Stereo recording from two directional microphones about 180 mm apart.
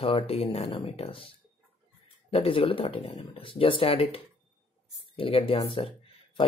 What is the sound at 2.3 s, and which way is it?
Speech, 30° left (ahead or behind).